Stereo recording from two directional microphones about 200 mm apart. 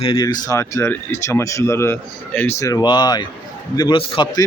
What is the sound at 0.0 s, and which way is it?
Speech, 25° left (ahead or behind).